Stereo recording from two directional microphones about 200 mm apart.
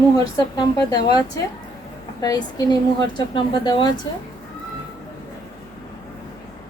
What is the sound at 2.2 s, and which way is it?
A woman's voice, 20° left (ahead or behind).